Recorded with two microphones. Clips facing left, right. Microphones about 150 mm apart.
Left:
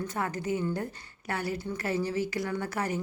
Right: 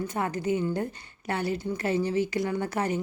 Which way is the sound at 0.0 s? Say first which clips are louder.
Right 3 dB; 20° right (ahead or behind).